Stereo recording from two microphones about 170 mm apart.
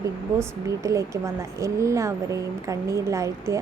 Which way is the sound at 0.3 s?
20° right (ahead or behind).